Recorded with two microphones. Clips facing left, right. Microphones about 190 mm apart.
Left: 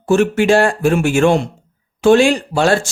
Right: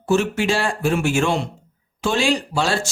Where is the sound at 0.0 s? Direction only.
55° left (ahead or behind).